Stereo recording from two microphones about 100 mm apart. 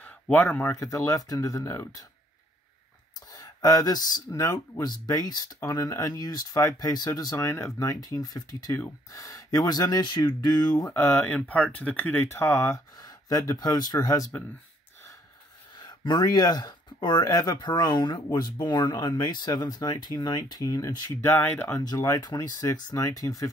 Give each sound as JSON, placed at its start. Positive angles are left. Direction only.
{"t": 0.0, "sound": "speech", "side_deg": 15}
{"t": 0.7, "sound": "speech", "side_deg": 35}
{"t": 3.3, "sound": "speech", "side_deg": 40}
{"t": 10.9, "sound": "speech", "side_deg": 25}
{"t": 11.2, "sound": "speech", "side_deg": 15}
{"t": 12.9, "sound": "speech", "side_deg": 40}
{"t": 15.8, "sound": "speech", "side_deg": 45}
{"t": 21.4, "sound": "speech", "side_deg": 20}
{"t": 21.7, "sound": "speech", "side_deg": 35}